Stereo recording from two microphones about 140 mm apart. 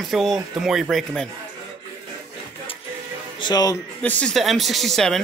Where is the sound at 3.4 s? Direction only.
25° left (ahead or behind).